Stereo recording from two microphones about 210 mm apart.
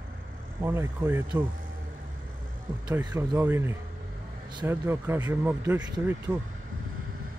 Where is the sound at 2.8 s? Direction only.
20° right (ahead or behind).